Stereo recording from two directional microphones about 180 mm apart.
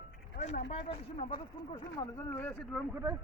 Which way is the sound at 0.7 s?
35° left (ahead or behind).